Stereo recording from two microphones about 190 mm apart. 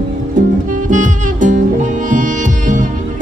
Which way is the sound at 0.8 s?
40° right (ahead or behind).